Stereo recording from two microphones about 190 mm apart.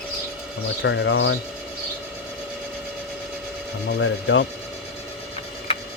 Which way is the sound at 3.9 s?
75° left (ahead or behind).